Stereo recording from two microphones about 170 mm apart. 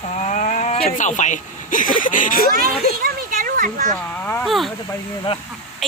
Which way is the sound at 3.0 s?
55° right (ahead or behind).